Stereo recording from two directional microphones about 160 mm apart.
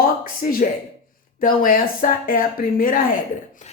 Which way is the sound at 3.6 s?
50° left (ahead or behind).